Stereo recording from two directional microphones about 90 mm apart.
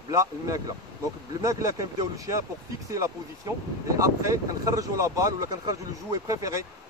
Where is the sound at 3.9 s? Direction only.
35° right (ahead or behind).